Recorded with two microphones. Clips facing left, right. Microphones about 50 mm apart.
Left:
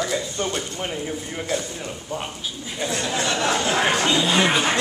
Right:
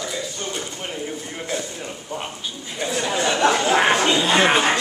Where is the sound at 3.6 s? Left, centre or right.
Right.